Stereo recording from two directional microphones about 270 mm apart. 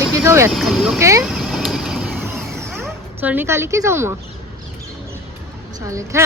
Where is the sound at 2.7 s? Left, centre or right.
Centre.